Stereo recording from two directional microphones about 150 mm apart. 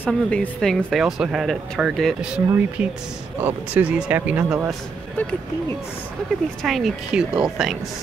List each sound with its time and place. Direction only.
0.0 s speech: 10° left (ahead or behind)
3.3 s speech: 10° right (ahead or behind)
6.6 s speech: centre (ahead or behind)